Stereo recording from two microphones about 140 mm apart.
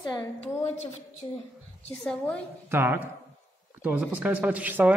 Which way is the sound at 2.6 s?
15° right (ahead or behind).